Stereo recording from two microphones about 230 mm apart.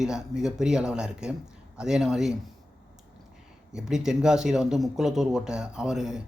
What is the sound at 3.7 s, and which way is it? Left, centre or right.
Speech, centre.